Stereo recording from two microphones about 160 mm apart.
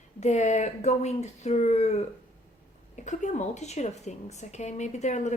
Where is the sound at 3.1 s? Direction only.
50° left (ahead or behind).